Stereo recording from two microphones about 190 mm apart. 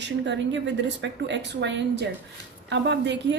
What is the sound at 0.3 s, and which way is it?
A woman's voice, 70° right (ahead or behind).